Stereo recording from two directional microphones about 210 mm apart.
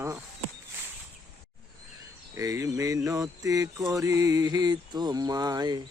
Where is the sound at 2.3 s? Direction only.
15° right (ahead or behind).